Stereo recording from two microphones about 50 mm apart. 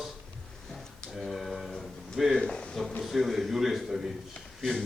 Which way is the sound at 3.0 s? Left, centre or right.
Centre.